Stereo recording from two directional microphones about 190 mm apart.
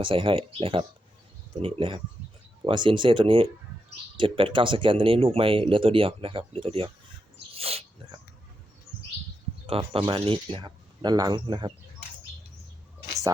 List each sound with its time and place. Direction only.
0.0 s speech: 25° right (ahead or behind)
7.5 s dog: 30° right (ahead or behind)
9.6 s speech: 30° right (ahead or behind)